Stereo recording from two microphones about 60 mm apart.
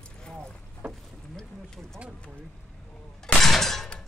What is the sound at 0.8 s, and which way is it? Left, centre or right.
Boat, right.